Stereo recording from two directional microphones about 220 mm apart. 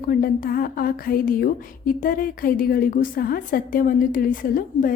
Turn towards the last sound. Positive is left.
turn(degrees=40)  # may be behind; listen again after turning